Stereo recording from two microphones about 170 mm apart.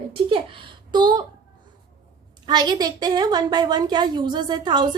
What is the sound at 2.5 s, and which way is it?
A woman's voice, 25° right (ahead or behind).